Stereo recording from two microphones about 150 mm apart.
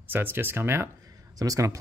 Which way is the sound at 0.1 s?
15° right (ahead or behind).